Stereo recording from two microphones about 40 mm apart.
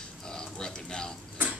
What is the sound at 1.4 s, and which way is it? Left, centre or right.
Tick-tock, right.